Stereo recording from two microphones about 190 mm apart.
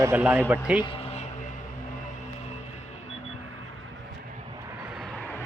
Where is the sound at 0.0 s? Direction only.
10° right (ahead or behind).